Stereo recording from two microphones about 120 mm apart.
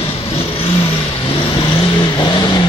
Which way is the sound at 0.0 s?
50° left (ahead or behind).